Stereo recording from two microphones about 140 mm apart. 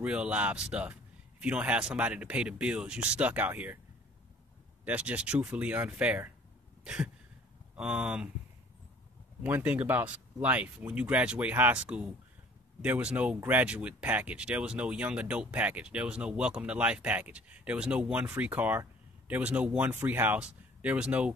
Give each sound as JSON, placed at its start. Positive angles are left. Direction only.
{"t": 0.0, "sound": "speech", "side_deg": -10}
{"t": 4.8, "sound": "speech", "side_deg": -10}
{"t": 6.8, "sound": "cough", "side_deg": -5}
{"t": 7.7, "sound": "speech", "side_deg": -10}
{"t": 9.4, "sound": "speech", "side_deg": -15}